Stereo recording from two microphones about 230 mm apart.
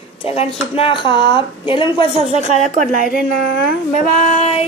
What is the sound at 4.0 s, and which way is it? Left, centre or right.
Female singing, left.